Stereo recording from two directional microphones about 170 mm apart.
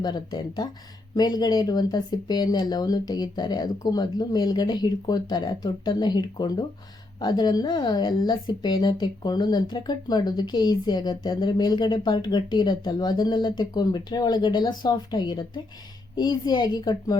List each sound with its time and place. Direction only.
0.0 s speech: 25° left (ahead or behind)